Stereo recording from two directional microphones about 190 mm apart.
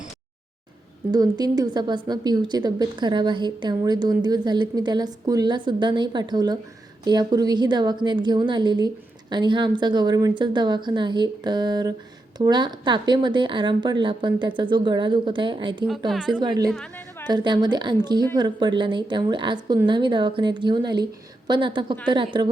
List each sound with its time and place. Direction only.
1.1 s a woman's voice: 20° right (ahead or behind)
16.0 s a woman's voice: 5° right (ahead or behind)
16.4 s a woman's voice: 20° right (ahead or behind)
16.7 s a woman's voice: 5° left (ahead or behind)
17.2 s a woman's voice: 25° right (ahead or behind)